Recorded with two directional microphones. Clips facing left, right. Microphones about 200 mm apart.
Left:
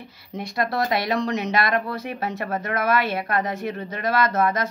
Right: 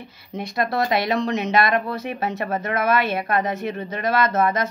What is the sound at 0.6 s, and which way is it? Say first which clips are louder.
Speech: right 2 dB; 20° right (ahead or behind).